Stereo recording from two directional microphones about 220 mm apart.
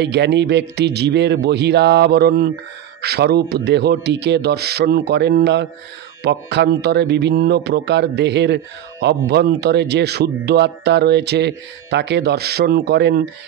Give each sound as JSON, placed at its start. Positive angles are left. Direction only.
{"t": 0.0, "sound": "speech", "side_deg": -50}